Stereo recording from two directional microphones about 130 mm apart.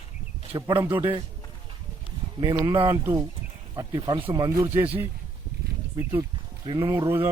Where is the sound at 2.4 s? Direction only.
30° right (ahead or behind).